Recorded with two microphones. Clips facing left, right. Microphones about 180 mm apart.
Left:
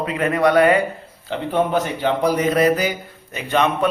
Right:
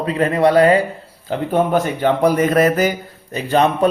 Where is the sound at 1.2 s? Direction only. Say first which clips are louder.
Right 3 dB; 45° right (ahead or behind).